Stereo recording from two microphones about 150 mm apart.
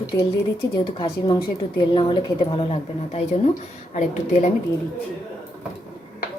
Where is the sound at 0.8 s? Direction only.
30° left (ahead or behind); by 4.5 s 50° left (ahead or behind).